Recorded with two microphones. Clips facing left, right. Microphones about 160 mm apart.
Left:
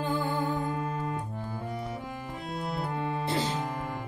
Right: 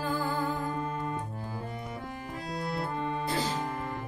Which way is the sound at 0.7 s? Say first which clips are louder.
Left 1 dB; 5° left (ahead or behind).